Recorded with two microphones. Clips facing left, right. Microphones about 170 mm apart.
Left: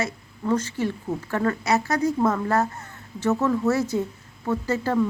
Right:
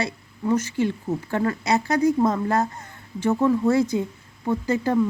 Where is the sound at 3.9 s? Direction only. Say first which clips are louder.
Right 1 dB; 20° right (ahead or behind).